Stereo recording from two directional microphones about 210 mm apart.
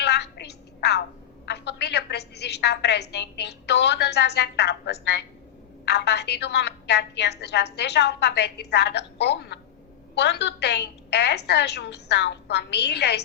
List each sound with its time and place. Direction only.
0.0 s telephone: 55° left (ahead or behind)
1.5 s a woman's voice: 55° left (ahead or behind)